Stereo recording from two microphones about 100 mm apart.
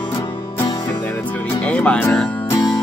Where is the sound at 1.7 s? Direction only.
15° left (ahead or behind).